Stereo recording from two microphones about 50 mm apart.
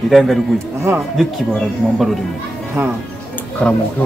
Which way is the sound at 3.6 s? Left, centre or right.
Left.